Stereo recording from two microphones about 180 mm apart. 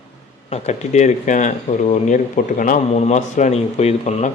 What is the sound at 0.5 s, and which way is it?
Speech, 40° left (ahead or behind).